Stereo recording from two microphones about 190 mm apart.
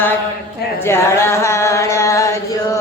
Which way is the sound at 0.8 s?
15° left (ahead or behind).